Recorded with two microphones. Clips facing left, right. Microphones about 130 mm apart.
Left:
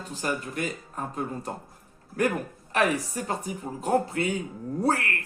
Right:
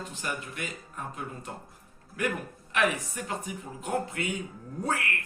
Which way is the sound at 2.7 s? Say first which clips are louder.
Left 3 dB; 35° left (ahead or behind).